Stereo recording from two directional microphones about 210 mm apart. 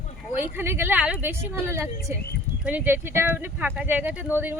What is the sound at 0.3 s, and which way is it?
Speech, 10° right (ahead or behind).